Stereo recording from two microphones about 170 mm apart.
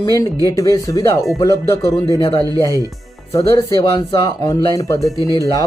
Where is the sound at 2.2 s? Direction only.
30° left (ahead or behind).